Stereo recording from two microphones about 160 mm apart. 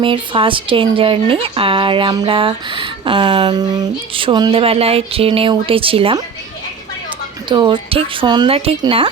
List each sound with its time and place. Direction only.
0.0 s speech: 35° right (ahead or behind)
7.4 s speech: 30° right (ahead or behind)